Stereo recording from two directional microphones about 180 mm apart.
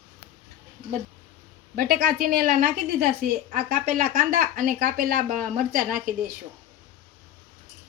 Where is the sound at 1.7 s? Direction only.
55° right (ahead or behind).